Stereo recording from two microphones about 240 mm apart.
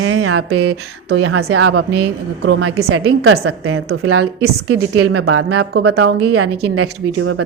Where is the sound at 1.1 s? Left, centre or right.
Right.